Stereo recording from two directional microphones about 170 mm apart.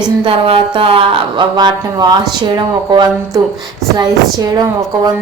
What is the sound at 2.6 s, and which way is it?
Music, 25° right (ahead or behind).